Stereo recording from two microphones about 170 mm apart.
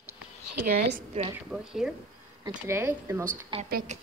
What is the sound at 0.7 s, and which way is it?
Speech, 65° right (ahead or behind).